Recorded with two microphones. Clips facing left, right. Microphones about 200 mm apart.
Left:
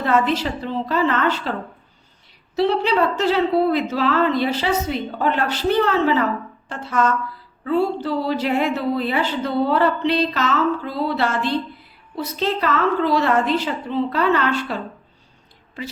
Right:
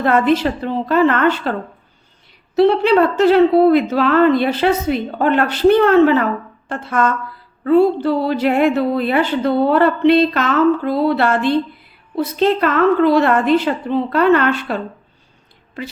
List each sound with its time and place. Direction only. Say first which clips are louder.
0.0 s a woman's voice: right 5 dB; 55° right (ahead or behind)
2.6 s a woman's voice: right 6 dB; 55° right (ahead or behind)